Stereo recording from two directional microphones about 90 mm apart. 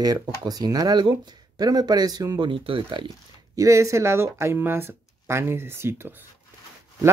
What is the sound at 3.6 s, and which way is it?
Speech, 35° right (ahead or behind).